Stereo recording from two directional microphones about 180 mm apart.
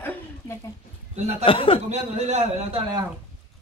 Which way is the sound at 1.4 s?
30° left (ahead or behind).